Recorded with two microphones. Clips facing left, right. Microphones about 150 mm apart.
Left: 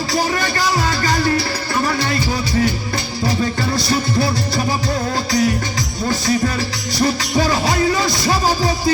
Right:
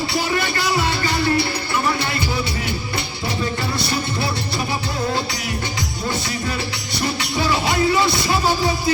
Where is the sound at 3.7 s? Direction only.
40° left (ahead or behind).